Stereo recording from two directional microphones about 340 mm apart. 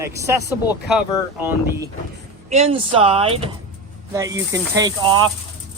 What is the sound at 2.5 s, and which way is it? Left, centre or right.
Speech, centre.